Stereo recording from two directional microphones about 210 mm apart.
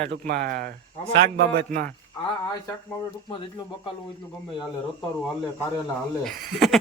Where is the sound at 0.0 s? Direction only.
50° right (ahead or behind).